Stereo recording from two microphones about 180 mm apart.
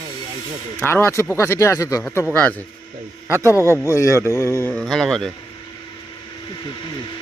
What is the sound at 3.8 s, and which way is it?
A man's voice, 15° left (ahead or behind).